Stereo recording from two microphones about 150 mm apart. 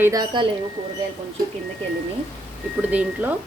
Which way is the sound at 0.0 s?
25° right (ahead or behind).